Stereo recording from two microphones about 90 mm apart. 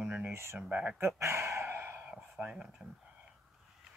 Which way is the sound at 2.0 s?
10° right (ahead or behind).